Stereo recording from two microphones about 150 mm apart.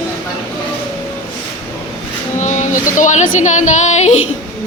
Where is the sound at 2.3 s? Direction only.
55° left (ahead or behind).